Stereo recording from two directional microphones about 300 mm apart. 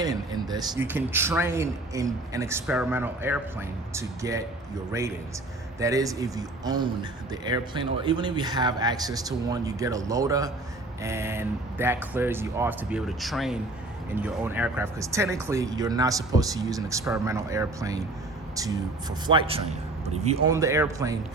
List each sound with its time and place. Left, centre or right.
0.0 s speech: centre
19.3 s speech: centre
20.5 s speech: centre